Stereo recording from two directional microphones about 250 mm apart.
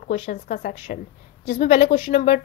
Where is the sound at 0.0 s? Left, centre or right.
Left.